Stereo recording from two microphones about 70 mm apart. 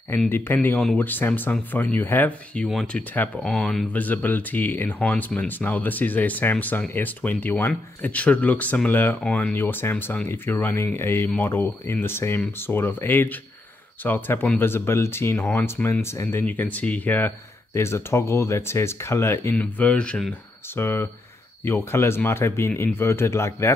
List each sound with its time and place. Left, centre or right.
0.3 s speech: left
2.5 s speech: centre
3.4 s speech: centre
3.9 s speech: left
16.4 s speech: left
17.7 s speech: left
19.5 s speech: left
20.7 s speech: left